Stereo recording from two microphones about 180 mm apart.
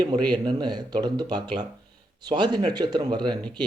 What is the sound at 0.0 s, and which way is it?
Speech, 25° right (ahead or behind).